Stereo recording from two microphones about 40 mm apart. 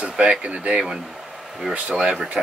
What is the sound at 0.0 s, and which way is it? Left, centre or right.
Speech, right.